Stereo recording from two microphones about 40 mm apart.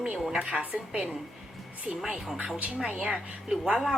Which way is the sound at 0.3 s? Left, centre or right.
Right.